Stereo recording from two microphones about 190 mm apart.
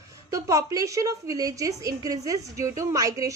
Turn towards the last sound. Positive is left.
turn(degrees=-20)  # may be behind; listen again after turning